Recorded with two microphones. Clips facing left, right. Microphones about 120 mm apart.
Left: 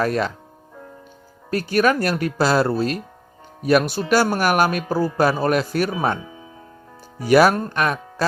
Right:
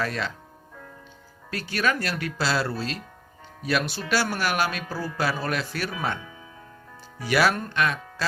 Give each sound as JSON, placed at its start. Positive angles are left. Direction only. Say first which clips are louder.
{"t": 0.0, "sound": "speech", "louder": "left 8 dB", "side_deg": 45}
{"t": 1.5, "sound": "speech", "louder": "left 8 dB", "side_deg": 45}
{"t": 5.9, "sound": "speech", "louder": "left 7 dB", "side_deg": 30}
{"t": 7.2, "sound": "speech", "louder": "left 8 dB", "side_deg": 45}